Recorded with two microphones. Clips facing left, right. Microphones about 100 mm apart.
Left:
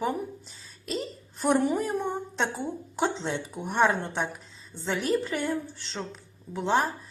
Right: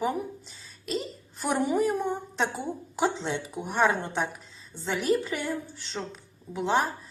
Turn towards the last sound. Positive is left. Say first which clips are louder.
# even
turn(degrees=0)  # may be behind; listen again after turning